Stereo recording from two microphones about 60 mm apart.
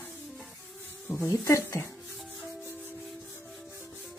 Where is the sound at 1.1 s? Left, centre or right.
Left.